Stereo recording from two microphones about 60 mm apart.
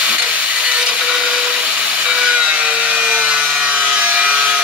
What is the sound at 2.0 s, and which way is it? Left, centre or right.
Wood, centre.